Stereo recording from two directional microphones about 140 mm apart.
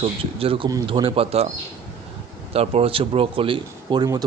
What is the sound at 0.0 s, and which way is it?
A man's voice, 40° right (ahead or behind).